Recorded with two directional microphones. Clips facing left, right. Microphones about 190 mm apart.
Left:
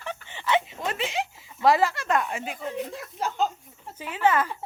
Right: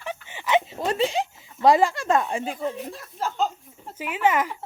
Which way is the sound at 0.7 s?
30° right (ahead or behind).